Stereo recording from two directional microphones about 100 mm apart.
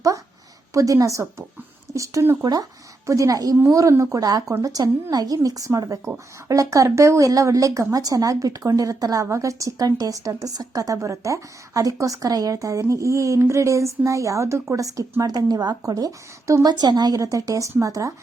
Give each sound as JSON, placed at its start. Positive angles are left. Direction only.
{"t": 0.7, "sound": "speech", "side_deg": -35}
{"t": 2.4, "sound": "speech", "side_deg": -40}